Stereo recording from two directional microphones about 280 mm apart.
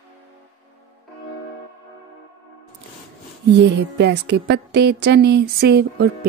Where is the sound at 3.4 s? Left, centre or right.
Right.